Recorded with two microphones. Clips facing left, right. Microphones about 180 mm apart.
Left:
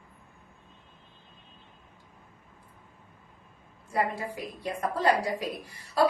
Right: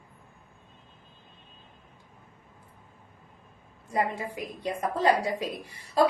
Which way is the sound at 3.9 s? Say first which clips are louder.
Even; 20° right (ahead or behind).